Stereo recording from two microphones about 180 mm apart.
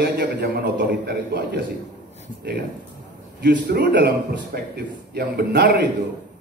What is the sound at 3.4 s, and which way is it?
Speech, 70° right (ahead or behind).